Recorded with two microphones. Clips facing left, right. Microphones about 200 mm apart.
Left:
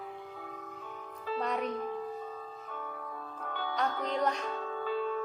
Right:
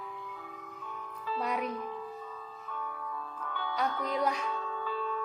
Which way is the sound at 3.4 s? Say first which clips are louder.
Even; 40° left (ahead or behind).